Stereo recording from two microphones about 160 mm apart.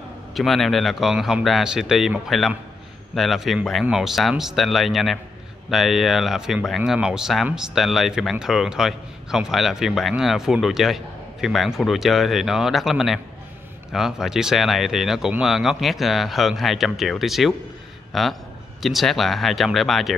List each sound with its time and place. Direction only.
0.3 s speech: centre (ahead or behind)